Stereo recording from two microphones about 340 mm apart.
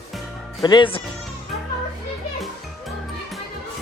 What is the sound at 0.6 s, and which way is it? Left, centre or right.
Speech, centre.